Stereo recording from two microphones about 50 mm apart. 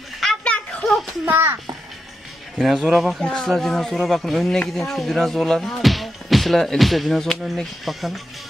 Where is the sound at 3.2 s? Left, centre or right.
Centre.